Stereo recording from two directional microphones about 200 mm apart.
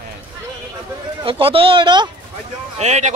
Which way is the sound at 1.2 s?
25° right (ahead or behind).